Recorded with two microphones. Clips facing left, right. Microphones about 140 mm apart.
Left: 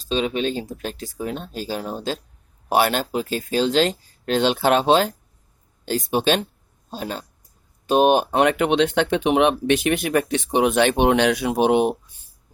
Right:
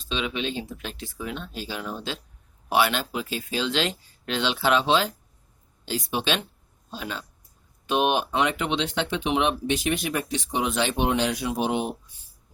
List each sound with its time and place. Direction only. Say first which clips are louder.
0.0 s speech: left 7 dB; 40° left (ahead or behind); by 11.9 s 65° left (ahead or behind)